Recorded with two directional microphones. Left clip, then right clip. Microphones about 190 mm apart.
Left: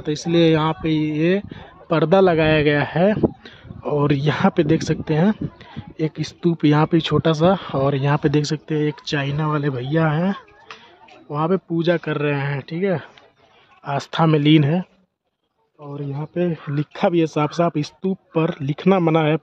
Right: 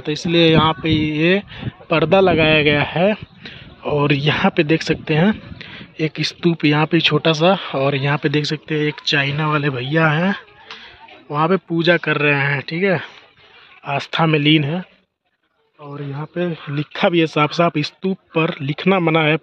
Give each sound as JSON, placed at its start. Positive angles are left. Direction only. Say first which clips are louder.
{"t": 0.0, "sound": "speech", "louder": "right 2 dB", "side_deg": 10}
{"t": 1.9, "sound": "a man's voice", "louder": "right 2 dB", "side_deg": 15}
{"t": 6.6, "sound": "speech", "louder": "right 2 dB", "side_deg": 15}
{"t": 13.8, "sound": "speech", "louder": "right 2 dB", "side_deg": 15}
{"t": 14.6, "sound": "speech", "louder": "left 2 dB", "side_deg": 30}
{"t": 16.1, "sound": "speech", "louder": "even", "side_deg": 10}
{"t": 16.4, "sound": "speech", "louder": "even", "side_deg": 25}
{"t": 16.9, "sound": "speech", "louder": "right 3 dB", "side_deg": 5}